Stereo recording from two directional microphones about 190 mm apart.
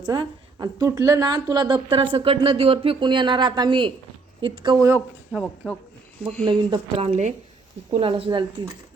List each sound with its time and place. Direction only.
0.0 s a woman's voice: 20° right (ahead or behind)
6.4 s a woman's voice: 25° right (ahead or behind)